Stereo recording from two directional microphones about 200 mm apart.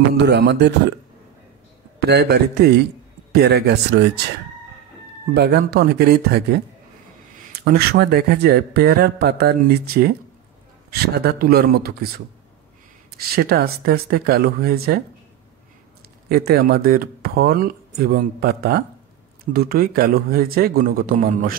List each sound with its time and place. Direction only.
0.2 s speech: 55° right (ahead or behind)
2.0 s a man's voice: 55° right (ahead or behind)
5.3 s speech: 55° right (ahead or behind)
7.5 s speech: 50° right (ahead or behind)
13.3 s speech: 50° right (ahead or behind)
16.3 s speech: 50° right (ahead or behind)